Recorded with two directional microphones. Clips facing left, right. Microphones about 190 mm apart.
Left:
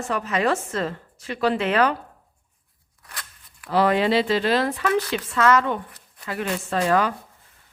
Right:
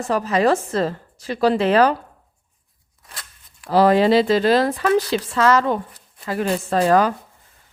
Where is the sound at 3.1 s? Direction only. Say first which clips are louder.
Even; 25° right (ahead or behind).